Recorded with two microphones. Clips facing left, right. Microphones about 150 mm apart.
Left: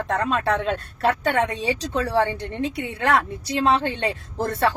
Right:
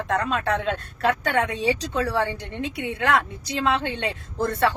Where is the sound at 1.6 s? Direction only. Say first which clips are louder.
Right 1 dB; 20° left (ahead or behind).